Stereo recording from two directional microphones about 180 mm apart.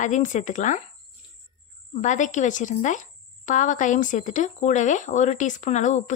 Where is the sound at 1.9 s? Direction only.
45° left (ahead or behind).